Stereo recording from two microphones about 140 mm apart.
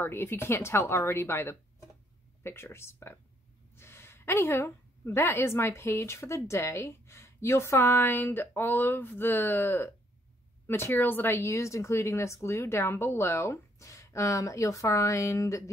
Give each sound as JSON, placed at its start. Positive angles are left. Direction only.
{"t": 0.0, "sound": "a woman's voice", "side_deg": 15}